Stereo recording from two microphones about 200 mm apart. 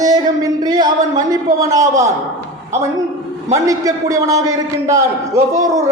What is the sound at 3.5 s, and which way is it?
A man's voice, 15° right (ahead or behind).